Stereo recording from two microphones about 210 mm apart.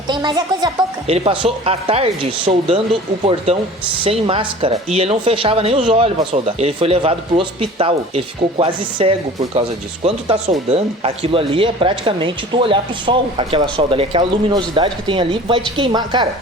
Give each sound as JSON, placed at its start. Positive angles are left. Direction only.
{"t": 0.1, "sound": "a woman's voice", "side_deg": -20}